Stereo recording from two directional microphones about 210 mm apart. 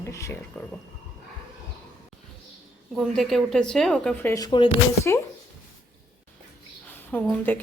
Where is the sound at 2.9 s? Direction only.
Centre (ahead or behind).